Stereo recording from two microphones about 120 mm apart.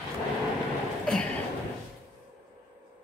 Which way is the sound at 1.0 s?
5° left (ahead or behind).